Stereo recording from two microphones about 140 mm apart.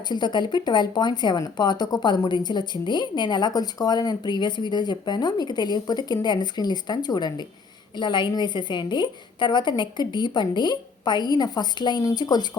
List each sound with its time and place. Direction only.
0.1 s speech: 30° left (ahead or behind)